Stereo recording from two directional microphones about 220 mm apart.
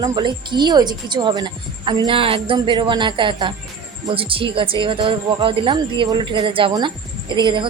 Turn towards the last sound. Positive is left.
turn(degrees=-20)  # may be behind; listen again after turning